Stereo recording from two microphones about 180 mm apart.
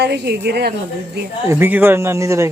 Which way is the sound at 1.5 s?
10° right (ahead or behind).